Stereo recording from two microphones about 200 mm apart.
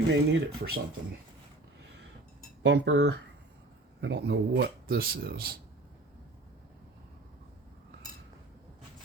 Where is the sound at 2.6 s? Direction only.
60° right (ahead or behind).